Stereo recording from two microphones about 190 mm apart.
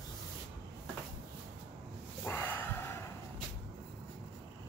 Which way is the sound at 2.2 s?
10° left (ahead or behind).